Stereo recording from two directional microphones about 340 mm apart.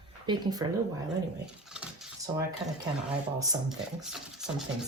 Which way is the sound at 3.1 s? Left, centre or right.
Centre.